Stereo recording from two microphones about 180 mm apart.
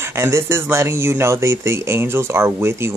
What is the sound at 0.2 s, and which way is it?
Speech, 15° right (ahead or behind).